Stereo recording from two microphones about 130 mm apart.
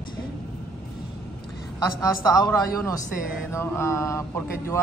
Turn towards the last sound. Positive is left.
turn(degrees=20)  # may be behind; listen again after turning